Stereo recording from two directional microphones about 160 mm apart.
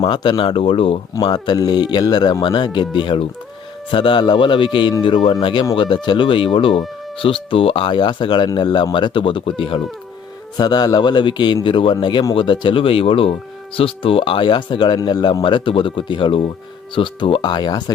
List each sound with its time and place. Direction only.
0.0 s a man's voice: 30° left (ahead or behind)